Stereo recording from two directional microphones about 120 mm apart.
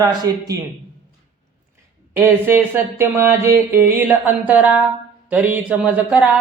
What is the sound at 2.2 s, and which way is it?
Speech, 15° right (ahead or behind).